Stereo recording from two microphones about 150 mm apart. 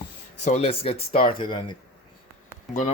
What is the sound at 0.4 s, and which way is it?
Speech, 45° left (ahead or behind).